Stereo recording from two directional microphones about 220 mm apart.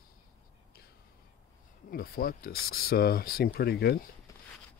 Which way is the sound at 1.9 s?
45° left (ahead or behind).